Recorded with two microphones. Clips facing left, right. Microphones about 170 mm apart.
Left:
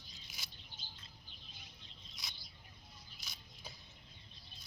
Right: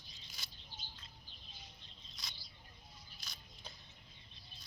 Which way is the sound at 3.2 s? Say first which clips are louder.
Even; 5° left (ahead or behind).